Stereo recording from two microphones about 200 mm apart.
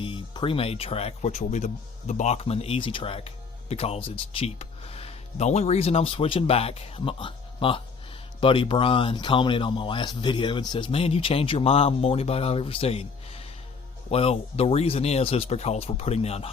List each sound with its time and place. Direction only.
0.0 s speech: 25° left (ahead or behind)